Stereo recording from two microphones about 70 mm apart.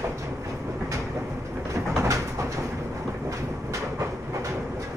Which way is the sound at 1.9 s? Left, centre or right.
Right.